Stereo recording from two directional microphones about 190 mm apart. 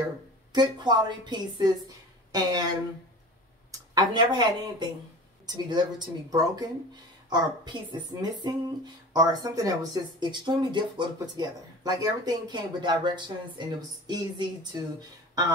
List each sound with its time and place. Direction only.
0.5 s speech: 20° right (ahead or behind)
3.9 s speech: 25° right (ahead or behind)